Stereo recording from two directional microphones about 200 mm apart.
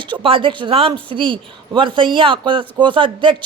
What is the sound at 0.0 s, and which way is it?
Speech, 25° right (ahead or behind).